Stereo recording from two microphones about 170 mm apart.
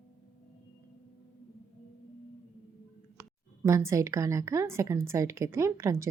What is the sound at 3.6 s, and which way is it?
Speech, 15° right (ahead or behind).